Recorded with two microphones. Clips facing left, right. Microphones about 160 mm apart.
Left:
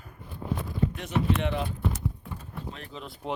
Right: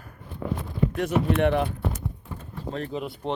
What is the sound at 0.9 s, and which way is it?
Speech, 60° right (ahead or behind).